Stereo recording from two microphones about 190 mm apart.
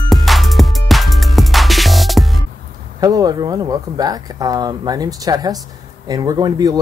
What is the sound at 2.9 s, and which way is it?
Speech, 20° right (ahead or behind).